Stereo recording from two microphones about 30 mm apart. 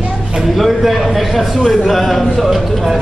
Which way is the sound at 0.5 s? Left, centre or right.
Centre.